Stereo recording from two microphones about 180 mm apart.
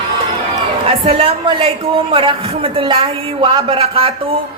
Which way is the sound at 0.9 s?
30° right (ahead or behind).